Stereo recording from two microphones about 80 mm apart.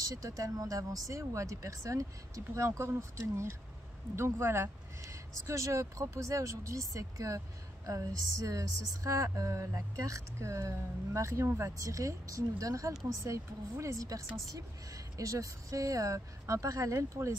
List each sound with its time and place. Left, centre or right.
0.0 s speech: right